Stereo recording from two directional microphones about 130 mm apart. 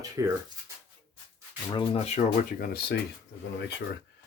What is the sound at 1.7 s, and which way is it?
Speech, 45° left (ahead or behind).